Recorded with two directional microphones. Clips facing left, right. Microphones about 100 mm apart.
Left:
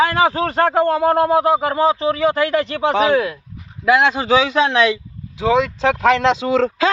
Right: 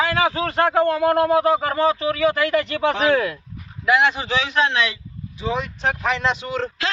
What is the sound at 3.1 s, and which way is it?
Speech, 15° left (ahead or behind).